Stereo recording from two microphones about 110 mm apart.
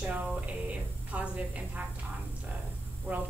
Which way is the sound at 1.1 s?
10° right (ahead or behind).